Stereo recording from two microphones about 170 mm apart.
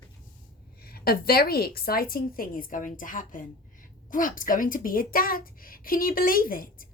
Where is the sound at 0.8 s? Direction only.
65° left (ahead or behind).